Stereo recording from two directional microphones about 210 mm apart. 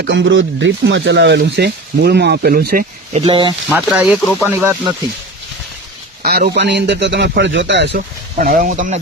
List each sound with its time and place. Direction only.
0.0 s speech: 60° right (ahead or behind)
3.1 s speech: 25° right (ahead or behind)
3.7 s speech: 5° right (ahead or behind)
6.2 s a man's voice: 45° right (ahead or behind)
8.4 s speech: 40° right (ahead or behind)